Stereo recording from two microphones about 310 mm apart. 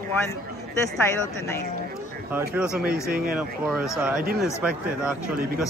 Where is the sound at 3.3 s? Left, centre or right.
Centre.